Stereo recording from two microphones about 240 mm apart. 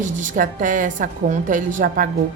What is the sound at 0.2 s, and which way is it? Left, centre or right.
A woman's voice, right.